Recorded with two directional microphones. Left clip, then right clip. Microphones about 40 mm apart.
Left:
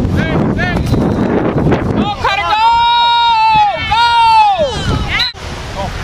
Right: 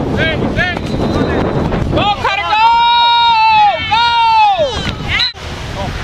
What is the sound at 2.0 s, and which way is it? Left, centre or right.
Hubbub, left.